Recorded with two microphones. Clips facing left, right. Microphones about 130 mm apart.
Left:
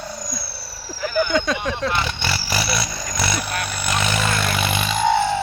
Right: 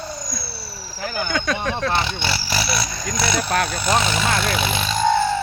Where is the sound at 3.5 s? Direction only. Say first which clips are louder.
Right 6 dB; 50° right (ahead or behind).